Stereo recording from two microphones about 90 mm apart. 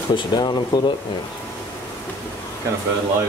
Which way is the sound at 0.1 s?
55° left (ahead or behind).